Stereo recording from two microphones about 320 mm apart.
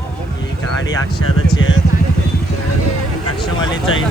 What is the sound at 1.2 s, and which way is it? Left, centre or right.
Speech, left.